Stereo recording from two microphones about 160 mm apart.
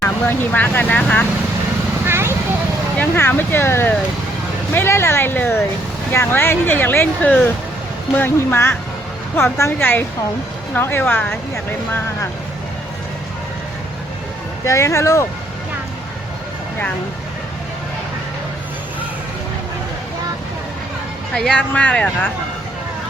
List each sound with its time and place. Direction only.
0.0 s speech: 10° left (ahead or behind)
2.0 s a sound: 15° right (ahead or behind)
3.0 s speech: 15° left (ahead or behind)
14.6 s speech: 20° left (ahead or behind)
21.3 s speech: 5° left (ahead or behind)